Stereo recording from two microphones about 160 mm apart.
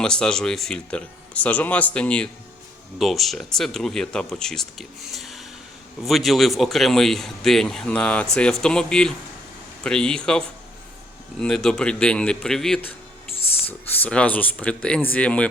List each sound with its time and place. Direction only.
0.0 s speech: 5° left (ahead or behind)
13.3 s a sound: 35° left (ahead or behind)
13.7 s speech: 10° left (ahead or behind)